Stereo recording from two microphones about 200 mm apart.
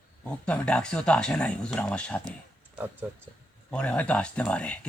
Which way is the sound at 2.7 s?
10° right (ahead or behind).